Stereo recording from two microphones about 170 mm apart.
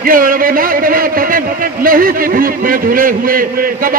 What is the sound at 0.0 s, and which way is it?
A man's voice, 55° right (ahead or behind).